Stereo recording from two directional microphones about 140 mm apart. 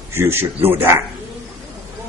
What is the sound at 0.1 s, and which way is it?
Speech, 15° right (ahead or behind).